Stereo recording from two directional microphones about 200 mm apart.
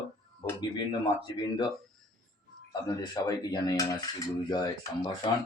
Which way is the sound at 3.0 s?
20° left (ahead or behind).